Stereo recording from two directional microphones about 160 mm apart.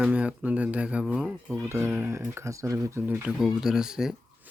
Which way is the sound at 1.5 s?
15° right (ahead or behind).